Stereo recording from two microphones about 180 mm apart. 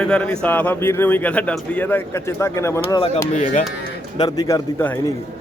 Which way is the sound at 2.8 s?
30° left (ahead or behind).